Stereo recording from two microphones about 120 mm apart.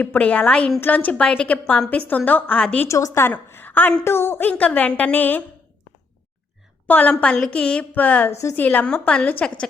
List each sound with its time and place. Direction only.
0.0 s a woman's voice: 15° left (ahead or behind)
2.8 s a woman's voice: 25° left (ahead or behind)
6.8 s a woman's voice: 15° left (ahead or behind)
8.4 s a woman's voice: 25° left (ahead or behind)
8.6 s a woman's voice: 10° left (ahead or behind)